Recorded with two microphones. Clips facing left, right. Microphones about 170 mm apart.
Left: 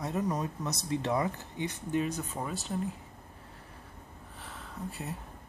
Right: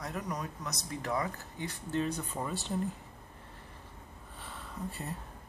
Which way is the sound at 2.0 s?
5° left (ahead or behind).